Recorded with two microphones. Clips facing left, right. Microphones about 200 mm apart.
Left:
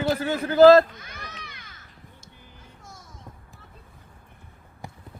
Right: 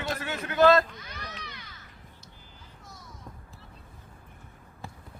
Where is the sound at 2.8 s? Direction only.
45° left (ahead or behind).